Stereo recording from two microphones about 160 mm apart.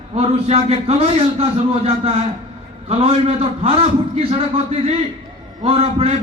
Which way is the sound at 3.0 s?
40° right (ahead or behind).